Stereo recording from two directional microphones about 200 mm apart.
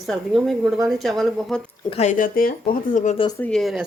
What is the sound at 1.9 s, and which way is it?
Speech, 35° left (ahead or behind).